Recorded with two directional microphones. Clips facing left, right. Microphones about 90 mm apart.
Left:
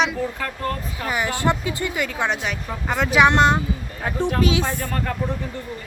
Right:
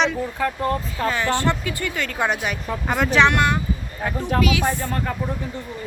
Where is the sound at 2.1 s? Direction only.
5° right (ahead or behind).